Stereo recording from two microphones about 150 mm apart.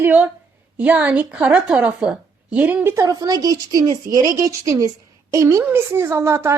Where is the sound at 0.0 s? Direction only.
10° right (ahead or behind).